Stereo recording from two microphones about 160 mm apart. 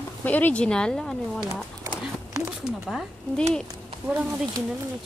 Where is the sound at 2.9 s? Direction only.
Centre (ahead or behind).